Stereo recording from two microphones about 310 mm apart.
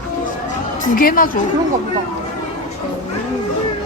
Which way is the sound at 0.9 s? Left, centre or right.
Left.